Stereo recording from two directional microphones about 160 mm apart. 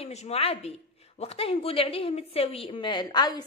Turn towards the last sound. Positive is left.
turn(degrees=25)  # may be behind; listen again after turning